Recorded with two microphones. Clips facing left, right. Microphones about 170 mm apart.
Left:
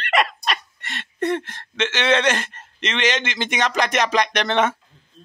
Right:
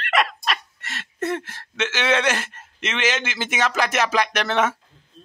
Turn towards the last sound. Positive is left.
turn(degrees=-5)  # may be behind; listen again after turning